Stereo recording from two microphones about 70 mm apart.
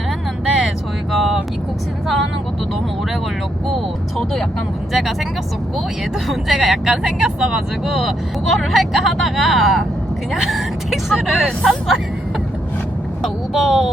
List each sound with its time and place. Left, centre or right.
0.4 s vehicle: centre
4.9 s speech: centre
6.2 s speech: centre
13.5 s speech: centre